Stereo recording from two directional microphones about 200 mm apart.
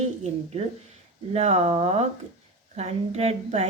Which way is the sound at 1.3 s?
35° right (ahead or behind).